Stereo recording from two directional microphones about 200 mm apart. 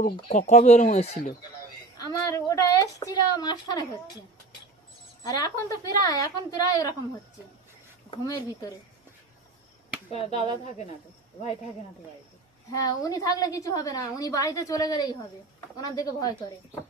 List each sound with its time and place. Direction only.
0.3 s speech: 40° left (ahead or behind)
2.0 s a woman's voice: 15° left (ahead or behind)
5.2 s a woman's voice: 20° left (ahead or behind)
8.1 s a woman's voice: 20° left (ahead or behind)
10.1 s a woman's voice: 30° left (ahead or behind)
12.7 s a woman's voice: 20° left (ahead or behind)